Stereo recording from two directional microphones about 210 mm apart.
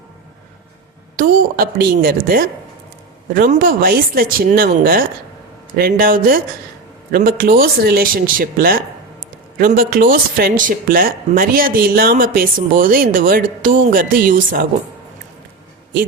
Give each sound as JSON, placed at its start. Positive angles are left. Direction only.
{"t": 1.1, "sound": "speech", "side_deg": -40}